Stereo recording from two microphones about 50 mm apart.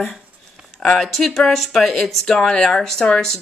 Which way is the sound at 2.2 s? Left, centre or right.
Centre.